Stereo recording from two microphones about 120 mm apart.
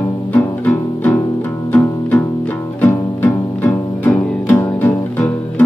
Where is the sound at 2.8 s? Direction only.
15° left (ahead or behind).